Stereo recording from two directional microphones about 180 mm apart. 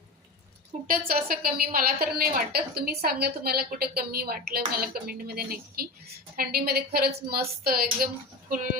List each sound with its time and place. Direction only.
0.9 s a woman's voice: 55° right (ahead or behind)